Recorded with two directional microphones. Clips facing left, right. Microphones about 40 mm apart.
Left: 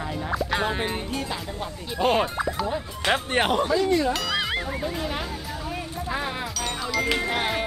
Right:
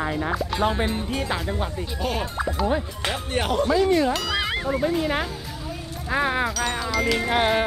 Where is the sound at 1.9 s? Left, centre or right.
Left.